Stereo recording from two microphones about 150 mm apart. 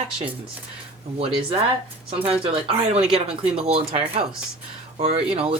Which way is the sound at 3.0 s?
5° right (ahead or behind).